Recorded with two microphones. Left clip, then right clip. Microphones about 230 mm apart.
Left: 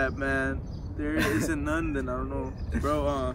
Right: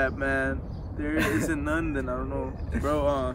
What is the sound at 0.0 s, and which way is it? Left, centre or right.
Speech, centre.